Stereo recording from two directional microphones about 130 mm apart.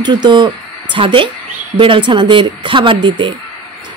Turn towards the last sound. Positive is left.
turn(degrees=-40)  # may be behind; listen again after turning